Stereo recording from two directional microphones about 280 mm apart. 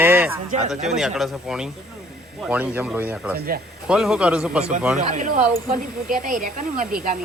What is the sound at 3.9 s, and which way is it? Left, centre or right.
Speech, centre.